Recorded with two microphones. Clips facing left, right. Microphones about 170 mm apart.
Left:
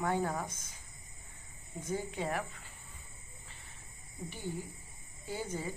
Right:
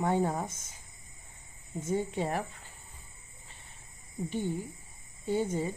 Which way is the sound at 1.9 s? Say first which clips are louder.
Right 5 dB; 25° right (ahead or behind).